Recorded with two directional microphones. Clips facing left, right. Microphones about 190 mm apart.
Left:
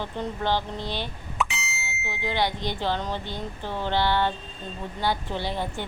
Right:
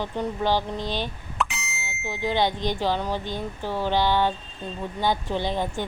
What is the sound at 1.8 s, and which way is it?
Bicycle bell, 50° right (ahead or behind).